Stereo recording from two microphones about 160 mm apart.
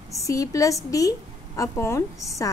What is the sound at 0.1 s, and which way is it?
A woman's voice, 20° left (ahead or behind).